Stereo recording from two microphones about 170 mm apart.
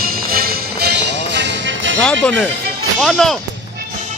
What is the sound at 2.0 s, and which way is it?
Speech, 5° left (ahead or behind).